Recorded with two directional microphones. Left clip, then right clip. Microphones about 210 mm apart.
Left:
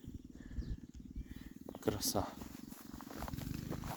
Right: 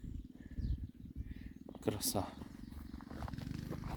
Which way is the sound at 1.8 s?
5° right (ahead or behind).